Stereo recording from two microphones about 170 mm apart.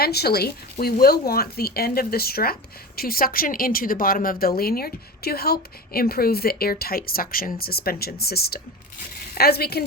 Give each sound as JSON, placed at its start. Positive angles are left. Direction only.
{"t": 0.0, "sound": "speech", "side_deg": 70}